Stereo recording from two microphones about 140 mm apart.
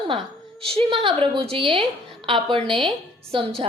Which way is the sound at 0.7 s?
40° right (ahead or behind).